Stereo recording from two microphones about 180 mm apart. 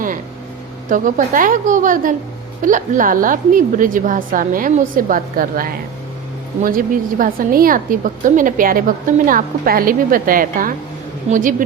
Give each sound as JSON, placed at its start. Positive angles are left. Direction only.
{"t": 0.9, "sound": "a woman's voice", "side_deg": -45}